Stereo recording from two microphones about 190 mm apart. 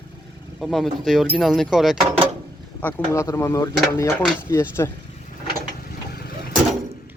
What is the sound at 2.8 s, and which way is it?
Speech, 10° left (ahead or behind).